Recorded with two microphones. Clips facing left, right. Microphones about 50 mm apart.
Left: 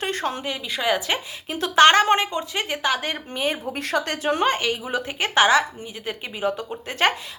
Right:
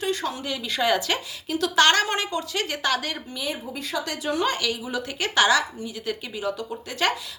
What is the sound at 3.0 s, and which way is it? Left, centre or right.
A woman's voice, left.